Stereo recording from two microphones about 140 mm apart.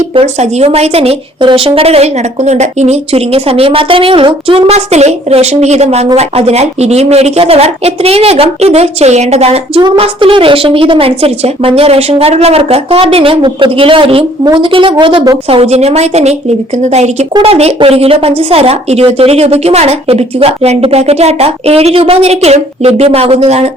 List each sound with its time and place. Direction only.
0.1 s a woman's voice: 45° right (ahead or behind)
15.4 s speech: 45° right (ahead or behind)